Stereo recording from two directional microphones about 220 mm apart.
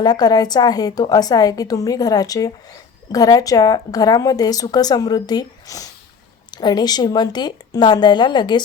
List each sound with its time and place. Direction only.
0.0 s a woman's voice: 20° left (ahead or behind)